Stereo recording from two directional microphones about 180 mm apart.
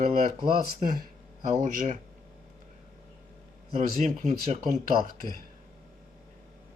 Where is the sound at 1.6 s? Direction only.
45° right (ahead or behind).